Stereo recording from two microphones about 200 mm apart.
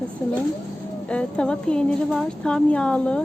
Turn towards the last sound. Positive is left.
turn(degrees=5)  # may be behind; listen again after turning